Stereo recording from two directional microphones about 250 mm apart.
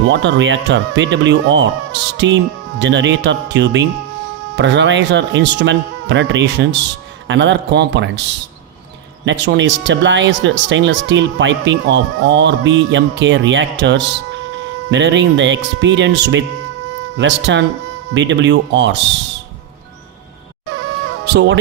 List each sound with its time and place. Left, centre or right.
0.1 s speech: right
9.2 s speech: right
21.2 s speech: right